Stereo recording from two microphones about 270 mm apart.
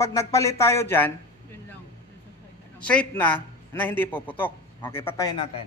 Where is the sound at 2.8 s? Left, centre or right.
Centre.